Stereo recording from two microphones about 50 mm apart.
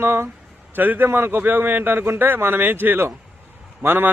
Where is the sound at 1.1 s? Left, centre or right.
Right.